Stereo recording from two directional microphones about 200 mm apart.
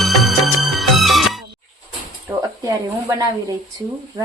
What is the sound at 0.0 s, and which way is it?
Music, centre (ahead or behind).